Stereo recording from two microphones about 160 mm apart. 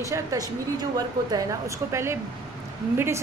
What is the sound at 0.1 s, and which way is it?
A woman's voice, 20° right (ahead or behind).